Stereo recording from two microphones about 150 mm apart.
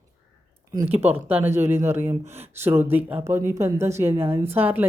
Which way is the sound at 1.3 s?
15° right (ahead or behind).